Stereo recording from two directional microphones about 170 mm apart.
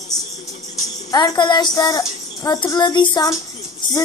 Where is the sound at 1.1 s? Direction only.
20° left (ahead or behind).